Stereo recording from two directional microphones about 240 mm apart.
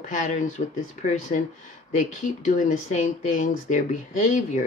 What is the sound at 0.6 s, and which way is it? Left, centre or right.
Speech, left.